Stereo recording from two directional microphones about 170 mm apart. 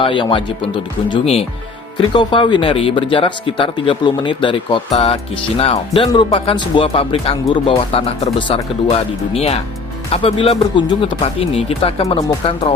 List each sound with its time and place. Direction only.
0.0 s speech: 30° left (ahead or behind)